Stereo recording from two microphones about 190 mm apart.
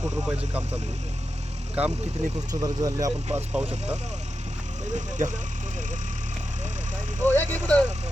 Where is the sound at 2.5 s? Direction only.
20° right (ahead or behind).